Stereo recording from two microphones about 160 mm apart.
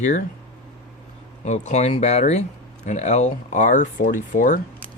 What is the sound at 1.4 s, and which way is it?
Speech, 45° left (ahead or behind).